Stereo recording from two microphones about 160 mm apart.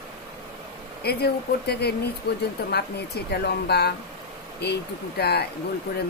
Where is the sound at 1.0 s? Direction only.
90° left.